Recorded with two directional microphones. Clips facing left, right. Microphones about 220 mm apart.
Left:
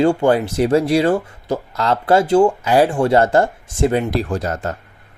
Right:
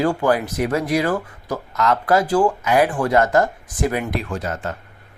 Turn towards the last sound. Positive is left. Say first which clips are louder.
# left 4 dB
turn(degrees=40)  # may be behind; listen again after turning